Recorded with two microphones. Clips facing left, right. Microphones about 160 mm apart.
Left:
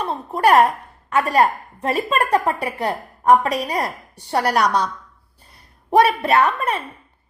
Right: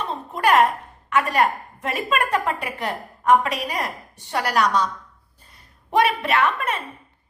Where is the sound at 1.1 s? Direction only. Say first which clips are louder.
Left 3 dB; 35° left (ahead or behind).